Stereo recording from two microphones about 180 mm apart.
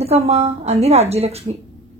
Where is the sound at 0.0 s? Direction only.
35° right (ahead or behind).